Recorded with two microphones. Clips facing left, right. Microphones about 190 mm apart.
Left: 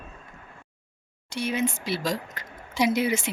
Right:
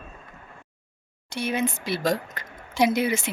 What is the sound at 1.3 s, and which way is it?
A woman's voice, 55° right (ahead or behind).